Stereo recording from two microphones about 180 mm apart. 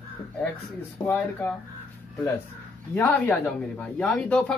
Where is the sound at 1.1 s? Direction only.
10° left (ahead or behind).